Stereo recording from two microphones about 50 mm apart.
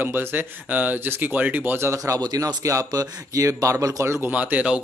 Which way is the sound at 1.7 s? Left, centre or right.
Right.